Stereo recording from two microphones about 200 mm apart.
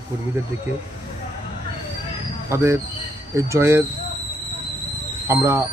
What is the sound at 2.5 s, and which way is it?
A man's voice, 15° right (ahead or behind).